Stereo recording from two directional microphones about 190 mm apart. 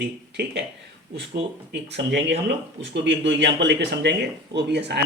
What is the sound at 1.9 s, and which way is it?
Speech, 65° right (ahead or behind).